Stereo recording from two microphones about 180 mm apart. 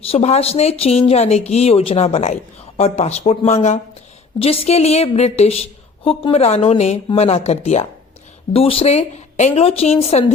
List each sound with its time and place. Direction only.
0.1 s speech: 35° left (ahead or behind)